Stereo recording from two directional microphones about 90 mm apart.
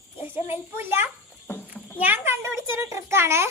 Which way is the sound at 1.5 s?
25° left (ahead or behind).